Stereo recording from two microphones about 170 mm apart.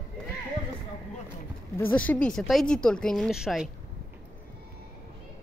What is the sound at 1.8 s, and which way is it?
Speech, 10° left (ahead or behind).